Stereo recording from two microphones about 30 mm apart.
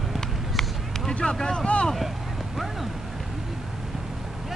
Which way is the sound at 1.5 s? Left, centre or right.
Left.